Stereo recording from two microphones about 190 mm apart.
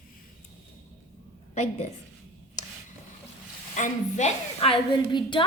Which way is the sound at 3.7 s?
40° left (ahead or behind).